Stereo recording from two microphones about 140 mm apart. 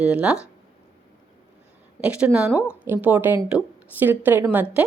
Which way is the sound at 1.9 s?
10° right (ahead or behind).